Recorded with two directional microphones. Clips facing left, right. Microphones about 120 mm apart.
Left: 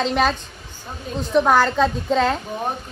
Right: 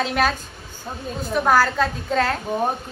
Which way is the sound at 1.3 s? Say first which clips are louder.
Left 2 dB; 5° right (ahead or behind).